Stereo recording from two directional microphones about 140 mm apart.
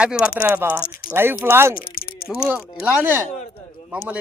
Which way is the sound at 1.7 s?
90° left.